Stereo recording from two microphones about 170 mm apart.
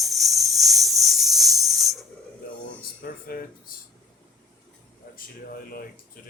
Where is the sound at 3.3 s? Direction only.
70° left (ahead or behind).